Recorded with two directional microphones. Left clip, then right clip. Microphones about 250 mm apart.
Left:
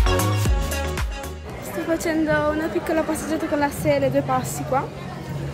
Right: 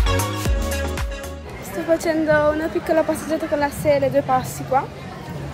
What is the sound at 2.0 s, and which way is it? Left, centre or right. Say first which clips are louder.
A woman's voice: right 3 dB; centre.